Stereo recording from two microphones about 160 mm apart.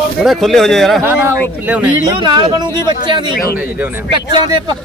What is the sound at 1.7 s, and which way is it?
Speech, 10° right (ahead or behind).